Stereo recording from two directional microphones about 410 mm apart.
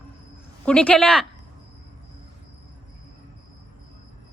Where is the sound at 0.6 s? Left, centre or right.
Centre.